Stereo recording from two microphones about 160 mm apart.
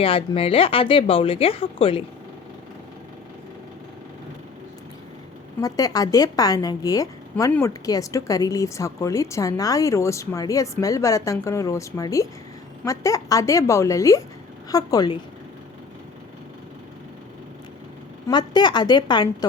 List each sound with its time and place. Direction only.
0.0 s speech: 35° left (ahead or behind)
5.5 s a woman's voice: 20° left (ahead or behind)
18.3 s a woman's voice: 25° left (ahead or behind)